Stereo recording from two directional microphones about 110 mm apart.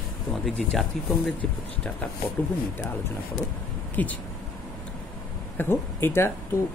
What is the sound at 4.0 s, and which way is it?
Speech, 15° left (ahead or behind).